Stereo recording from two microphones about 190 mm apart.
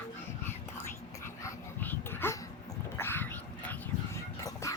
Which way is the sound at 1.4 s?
10° left (ahead or behind).